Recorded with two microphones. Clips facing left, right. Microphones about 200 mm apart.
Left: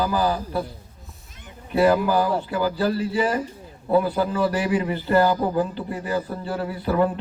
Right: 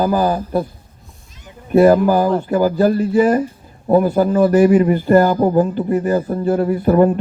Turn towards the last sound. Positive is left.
turn(degrees=-45)  # may be behind; listen again after turning